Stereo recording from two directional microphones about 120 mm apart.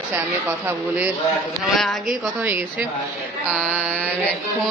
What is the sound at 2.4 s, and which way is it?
A woman's voice, 15° right (ahead or behind).